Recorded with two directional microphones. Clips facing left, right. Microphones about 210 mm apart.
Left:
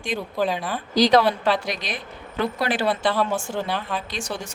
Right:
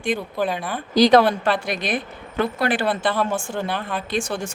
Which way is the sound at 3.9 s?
50° right (ahead or behind).